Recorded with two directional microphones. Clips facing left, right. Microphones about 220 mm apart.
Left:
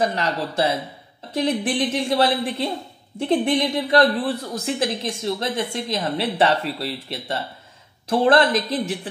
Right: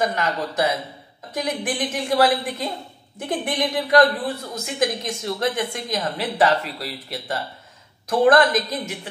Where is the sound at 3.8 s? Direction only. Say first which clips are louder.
Right 2 dB; 30° left (ahead or behind).